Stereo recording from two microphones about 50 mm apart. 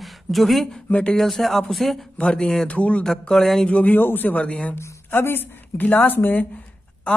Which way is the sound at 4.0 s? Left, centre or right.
Left.